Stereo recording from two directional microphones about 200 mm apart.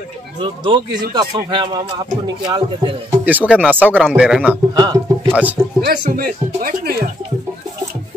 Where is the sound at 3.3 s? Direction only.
10° right (ahead or behind).